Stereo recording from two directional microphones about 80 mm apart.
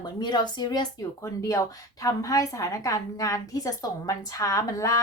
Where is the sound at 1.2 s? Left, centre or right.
Left.